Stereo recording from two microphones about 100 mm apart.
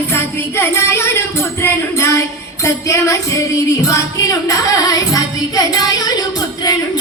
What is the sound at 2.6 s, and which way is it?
Music, 30° left (ahead or behind).